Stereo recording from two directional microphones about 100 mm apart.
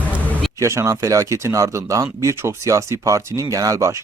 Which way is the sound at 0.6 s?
30° right (ahead or behind).